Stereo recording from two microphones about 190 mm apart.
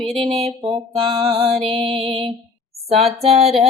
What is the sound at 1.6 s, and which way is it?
Music, 30° right (ahead or behind).